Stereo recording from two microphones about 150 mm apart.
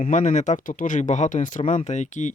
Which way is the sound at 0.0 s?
55° left (ahead or behind).